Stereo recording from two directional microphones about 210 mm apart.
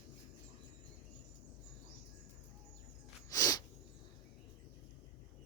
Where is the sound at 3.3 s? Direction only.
15° left (ahead or behind).